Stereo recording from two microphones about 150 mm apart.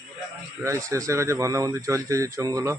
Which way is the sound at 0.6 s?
20° right (ahead or behind).